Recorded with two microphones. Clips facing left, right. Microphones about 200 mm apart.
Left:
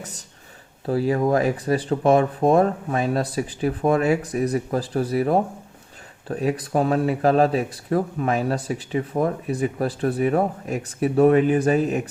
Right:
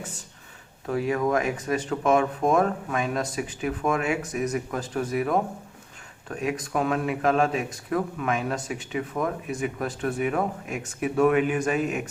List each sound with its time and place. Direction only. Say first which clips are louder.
0.0 s speech: even; 40° left (ahead or behind)